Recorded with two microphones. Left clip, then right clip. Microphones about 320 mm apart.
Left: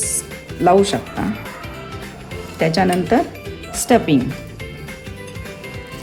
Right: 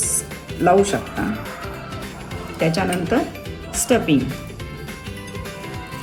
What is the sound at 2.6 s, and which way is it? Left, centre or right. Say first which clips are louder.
Speech: left 4 dB; left.